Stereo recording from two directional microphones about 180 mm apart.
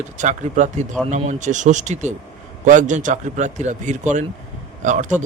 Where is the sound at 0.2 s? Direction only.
40° right (ahead or behind).